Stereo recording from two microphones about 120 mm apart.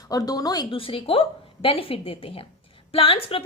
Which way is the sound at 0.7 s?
50° left (ahead or behind).